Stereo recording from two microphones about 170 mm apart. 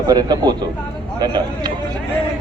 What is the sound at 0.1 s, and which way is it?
Speech, 25° right (ahead or behind).